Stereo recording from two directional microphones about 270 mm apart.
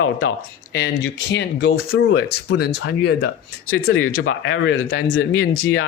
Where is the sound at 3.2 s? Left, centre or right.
Left.